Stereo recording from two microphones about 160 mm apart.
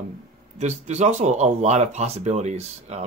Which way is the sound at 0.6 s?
45° right (ahead or behind).